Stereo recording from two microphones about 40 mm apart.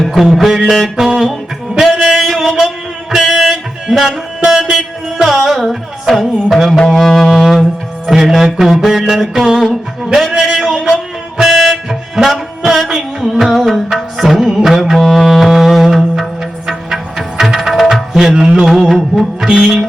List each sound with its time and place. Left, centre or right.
0.0 s music: centre
1.8 s a sound: centre
2.2 s mantra: centre
3.2 s music: centre
6.1 s music: centre
7.3 s music: centre
10.3 s a man's voice: centre
10.6 s a sound: centre
11.3 s music: centre
19.5 s music: right